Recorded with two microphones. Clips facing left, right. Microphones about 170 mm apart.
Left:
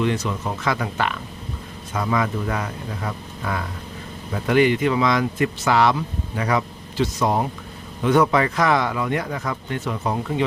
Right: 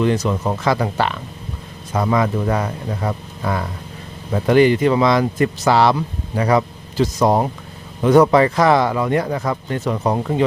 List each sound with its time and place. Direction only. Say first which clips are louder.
0.0 s speech: right 5 dB; 40° right (ahead or behind)